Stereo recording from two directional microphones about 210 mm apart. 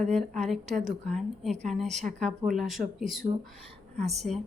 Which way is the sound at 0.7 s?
40° right (ahead or behind).